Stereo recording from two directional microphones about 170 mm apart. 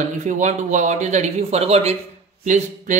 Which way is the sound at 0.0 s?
45° right (ahead or behind).